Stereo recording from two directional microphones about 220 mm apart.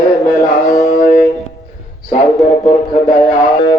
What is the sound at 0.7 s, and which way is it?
Speech, 35° left (ahead or behind).